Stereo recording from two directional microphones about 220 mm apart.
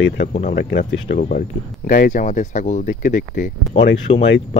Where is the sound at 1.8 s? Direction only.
40° left (ahead or behind).